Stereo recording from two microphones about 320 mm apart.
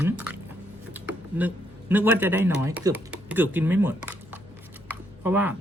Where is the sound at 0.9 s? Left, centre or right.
Centre.